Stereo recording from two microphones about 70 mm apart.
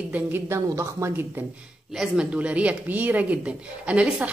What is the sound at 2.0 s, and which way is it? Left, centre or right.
Speech, centre.